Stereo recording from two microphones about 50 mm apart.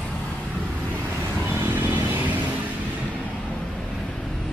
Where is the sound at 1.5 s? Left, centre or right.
Right.